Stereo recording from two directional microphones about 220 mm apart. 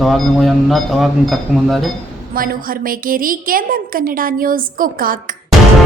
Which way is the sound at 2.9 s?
40° right (ahead or behind).